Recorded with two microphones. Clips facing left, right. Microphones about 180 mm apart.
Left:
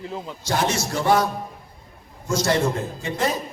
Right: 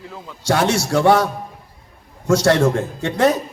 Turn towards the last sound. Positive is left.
turn(degrees=-70)  # may be behind; listen again after turning